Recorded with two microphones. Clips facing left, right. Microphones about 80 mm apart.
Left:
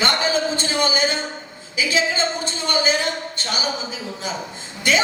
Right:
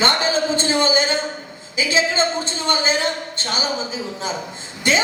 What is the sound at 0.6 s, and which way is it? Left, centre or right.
A woman's voice, right.